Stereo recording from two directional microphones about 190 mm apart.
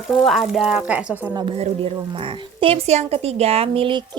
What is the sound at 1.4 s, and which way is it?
A man's voice, 30° right (ahead or behind).